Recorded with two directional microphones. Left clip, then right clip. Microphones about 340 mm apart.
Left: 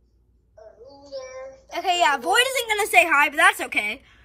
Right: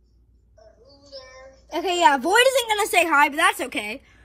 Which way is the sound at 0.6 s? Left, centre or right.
Left.